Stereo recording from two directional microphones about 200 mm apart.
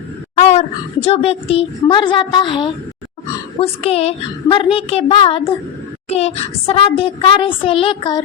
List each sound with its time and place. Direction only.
0.3 s throat clearing: 35° left (ahead or behind)
1.0 s speech: 30° left (ahead or behind)